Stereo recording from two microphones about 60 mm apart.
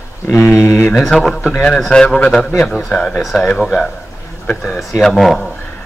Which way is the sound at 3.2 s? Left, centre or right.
Centre.